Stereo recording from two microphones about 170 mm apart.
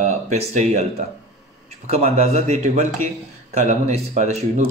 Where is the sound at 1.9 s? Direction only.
40° right (ahead or behind).